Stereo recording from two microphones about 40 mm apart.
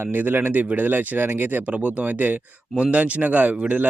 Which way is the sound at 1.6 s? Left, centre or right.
Right.